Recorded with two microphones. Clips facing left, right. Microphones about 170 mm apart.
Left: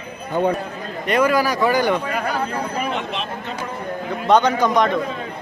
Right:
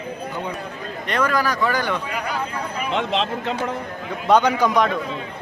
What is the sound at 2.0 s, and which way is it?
Speech, 45° left (ahead or behind).